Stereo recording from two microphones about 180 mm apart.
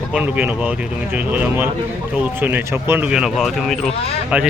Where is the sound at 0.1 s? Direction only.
5° right (ahead or behind).